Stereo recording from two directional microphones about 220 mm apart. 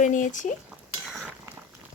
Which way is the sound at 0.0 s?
35° left (ahead or behind).